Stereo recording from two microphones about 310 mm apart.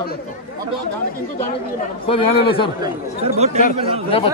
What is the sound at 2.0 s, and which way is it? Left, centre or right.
Speech, centre.